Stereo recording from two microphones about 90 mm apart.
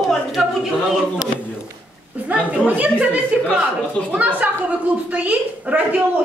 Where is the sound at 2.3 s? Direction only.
15° right (ahead or behind).